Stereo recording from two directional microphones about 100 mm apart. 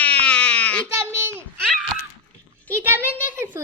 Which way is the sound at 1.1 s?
25° right (ahead or behind).